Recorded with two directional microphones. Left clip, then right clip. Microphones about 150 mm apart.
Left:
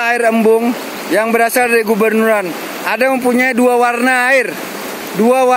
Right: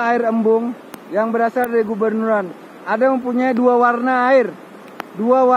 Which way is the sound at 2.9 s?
20° left (ahead or behind).